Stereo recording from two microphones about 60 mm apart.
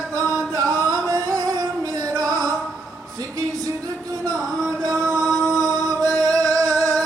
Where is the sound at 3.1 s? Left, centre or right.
Right.